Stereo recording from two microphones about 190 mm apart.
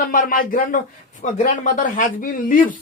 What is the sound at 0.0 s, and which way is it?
Speech, 45° left (ahead or behind).